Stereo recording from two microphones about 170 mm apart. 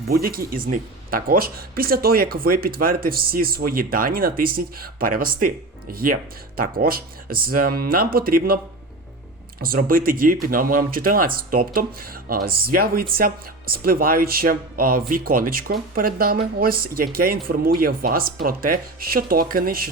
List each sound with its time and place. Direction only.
0.1 s speech: 60° right (ahead or behind)
9.6 s speech: 60° right (ahead or behind)